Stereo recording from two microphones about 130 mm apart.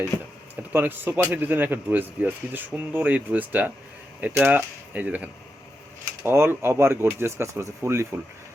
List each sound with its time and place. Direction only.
0.1 s speech: 25° left (ahead or behind)
0.5 s speech: 15° right (ahead or behind)